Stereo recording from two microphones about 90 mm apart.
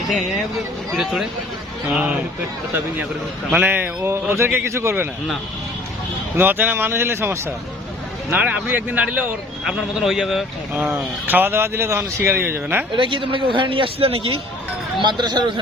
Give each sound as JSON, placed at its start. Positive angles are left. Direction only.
{"t": 0.9, "sound": "speech", "side_deg": -5}
{"t": 1.9, "sound": "speech", "side_deg": -15}
{"t": 3.5, "sound": "speech", "side_deg": -20}
{"t": 6.3, "sound": "speech", "side_deg": -20}
{"t": 8.4, "sound": "speech", "side_deg": -15}
{"t": 9.6, "sound": "speech", "side_deg": -5}
{"t": 10.8, "sound": "speech", "side_deg": -20}
{"t": 12.9, "sound": "a man's voice", "side_deg": -65}
{"t": 15.0, "sound": "speech", "side_deg": -55}